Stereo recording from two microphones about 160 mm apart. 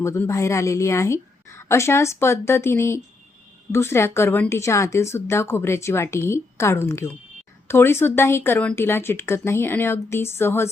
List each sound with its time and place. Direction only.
0.0 s a woman's voice: 20° left (ahead or behind)